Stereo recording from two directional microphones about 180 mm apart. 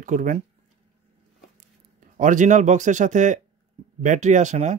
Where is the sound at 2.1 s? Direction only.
45° right (ahead or behind).